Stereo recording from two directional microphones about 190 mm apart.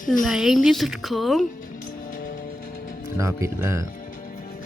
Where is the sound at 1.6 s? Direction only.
45° left (ahead or behind).